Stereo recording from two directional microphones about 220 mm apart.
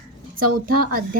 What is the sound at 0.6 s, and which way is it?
Speech, 40° right (ahead or behind).